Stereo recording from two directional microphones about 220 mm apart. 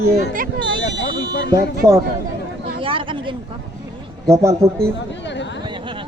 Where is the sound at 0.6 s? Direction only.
55° right (ahead or behind).